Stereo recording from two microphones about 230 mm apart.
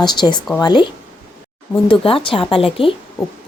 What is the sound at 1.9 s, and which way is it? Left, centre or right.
A woman's voice, left.